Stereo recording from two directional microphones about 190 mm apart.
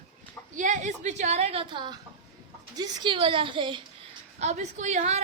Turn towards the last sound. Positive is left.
turn(degrees=-35)  # may be behind; listen again after turning